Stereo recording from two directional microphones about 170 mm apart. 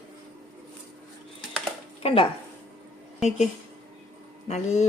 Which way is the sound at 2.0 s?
35° left (ahead or behind).